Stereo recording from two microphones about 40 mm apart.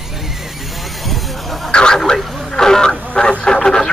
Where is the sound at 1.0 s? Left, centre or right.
Centre.